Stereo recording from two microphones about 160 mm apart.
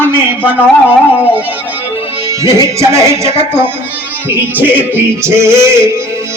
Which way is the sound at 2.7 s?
20° right (ahead or behind).